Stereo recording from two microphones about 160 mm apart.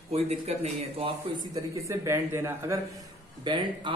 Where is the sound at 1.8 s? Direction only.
15° right (ahead or behind).